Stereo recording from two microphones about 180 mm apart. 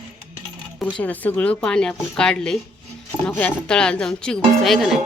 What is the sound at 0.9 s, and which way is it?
Speech, 10° left (ahead or behind).